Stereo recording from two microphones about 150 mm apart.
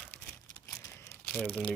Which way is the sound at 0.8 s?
20° left (ahead or behind).